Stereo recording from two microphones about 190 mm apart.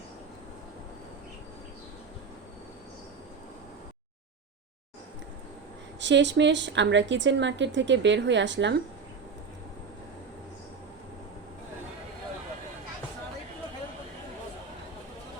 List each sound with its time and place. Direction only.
6.0 s a woman's voice: 70° right (ahead or behind)